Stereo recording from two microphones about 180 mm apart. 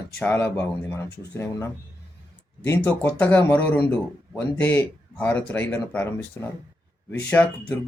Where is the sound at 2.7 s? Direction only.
10° left (ahead or behind).